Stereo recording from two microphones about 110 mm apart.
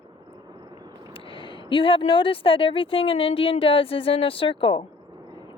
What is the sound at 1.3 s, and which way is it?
Speech, 50° left (ahead or behind).